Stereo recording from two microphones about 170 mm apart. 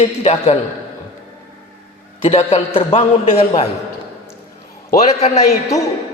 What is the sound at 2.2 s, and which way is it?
A man's voice, 35° left (ahead or behind).